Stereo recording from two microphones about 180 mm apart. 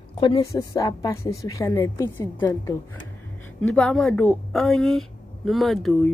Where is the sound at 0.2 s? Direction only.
20° left (ahead or behind).